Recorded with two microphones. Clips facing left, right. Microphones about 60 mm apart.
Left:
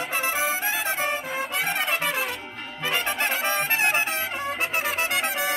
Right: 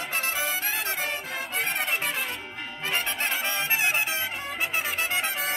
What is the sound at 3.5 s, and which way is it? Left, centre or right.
Music, left.